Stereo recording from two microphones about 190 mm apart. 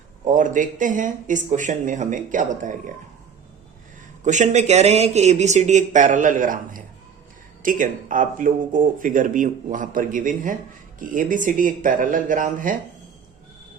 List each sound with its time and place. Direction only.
0.3 s speech: 40° right (ahead or behind)
4.2 s speech: 40° right (ahead or behind)